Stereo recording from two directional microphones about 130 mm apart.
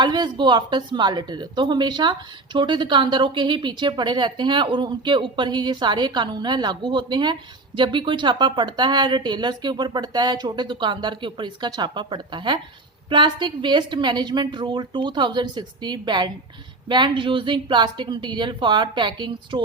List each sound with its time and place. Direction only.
0.0 s speech: 35° right (ahead or behind)